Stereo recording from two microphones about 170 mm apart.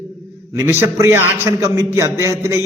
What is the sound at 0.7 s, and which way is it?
A man's voice, 15° right (ahead or behind).